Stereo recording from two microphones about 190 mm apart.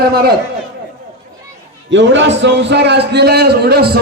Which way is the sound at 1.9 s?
70° right (ahead or behind).